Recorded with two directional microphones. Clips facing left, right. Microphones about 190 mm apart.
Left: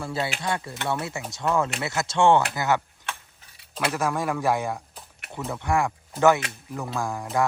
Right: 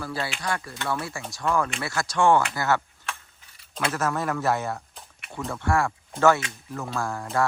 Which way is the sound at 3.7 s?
5° left (ahead or behind).